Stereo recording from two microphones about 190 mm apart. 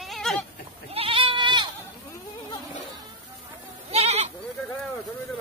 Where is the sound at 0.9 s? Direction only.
30° right (ahead or behind).